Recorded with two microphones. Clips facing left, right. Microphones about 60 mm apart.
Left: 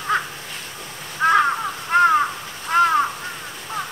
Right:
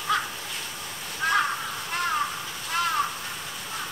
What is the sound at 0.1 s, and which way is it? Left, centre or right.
Crow, left.